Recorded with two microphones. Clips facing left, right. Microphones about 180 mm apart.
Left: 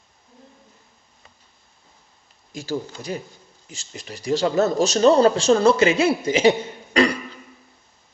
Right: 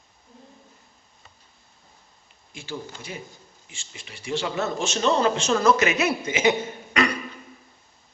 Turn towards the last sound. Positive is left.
turn(degrees=30)  # may be behind; listen again after turning